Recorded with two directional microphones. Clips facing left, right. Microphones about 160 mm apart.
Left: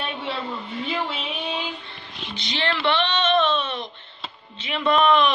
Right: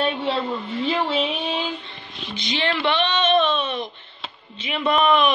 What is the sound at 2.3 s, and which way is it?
Speech, 15° right (ahead or behind).